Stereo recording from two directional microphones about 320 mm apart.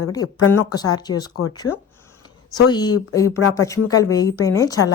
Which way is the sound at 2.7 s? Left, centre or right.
Centre.